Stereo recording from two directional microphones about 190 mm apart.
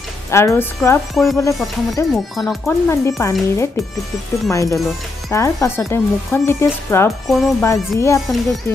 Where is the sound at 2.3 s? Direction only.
Centre (ahead or behind).